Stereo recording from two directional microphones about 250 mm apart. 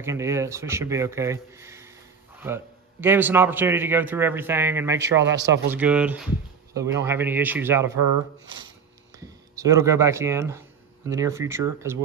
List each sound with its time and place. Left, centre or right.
0.0 s a man's voice: centre
5.2 s a man's voice: right
5.7 s a man's voice: centre
9.2 s a man's voice: centre